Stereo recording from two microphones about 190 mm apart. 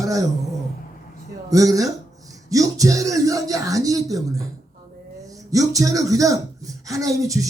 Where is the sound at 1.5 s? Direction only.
20° right (ahead or behind).